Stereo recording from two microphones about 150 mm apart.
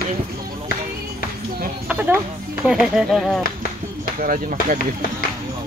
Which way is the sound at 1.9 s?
10° right (ahead or behind).